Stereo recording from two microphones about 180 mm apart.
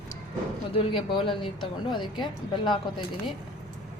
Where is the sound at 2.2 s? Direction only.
25° left (ahead or behind).